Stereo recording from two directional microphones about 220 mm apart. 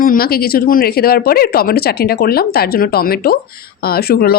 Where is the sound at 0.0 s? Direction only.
40° left (ahead or behind).